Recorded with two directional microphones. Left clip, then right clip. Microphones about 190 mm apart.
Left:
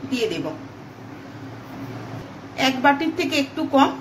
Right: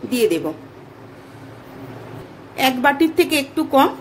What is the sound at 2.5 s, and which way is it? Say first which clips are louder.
A woman's voice: right 2 dB; 40° right (ahead or behind).